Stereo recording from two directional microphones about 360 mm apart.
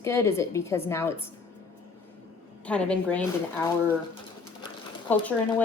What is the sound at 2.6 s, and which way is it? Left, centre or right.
Speech, centre.